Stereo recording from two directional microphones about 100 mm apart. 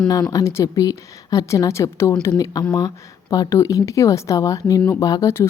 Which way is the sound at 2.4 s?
40° left (ahead or behind).